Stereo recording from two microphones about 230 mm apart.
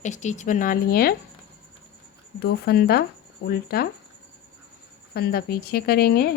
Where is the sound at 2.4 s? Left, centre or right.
Left.